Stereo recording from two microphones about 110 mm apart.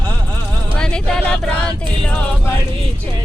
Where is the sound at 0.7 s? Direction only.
5° left (ahead or behind).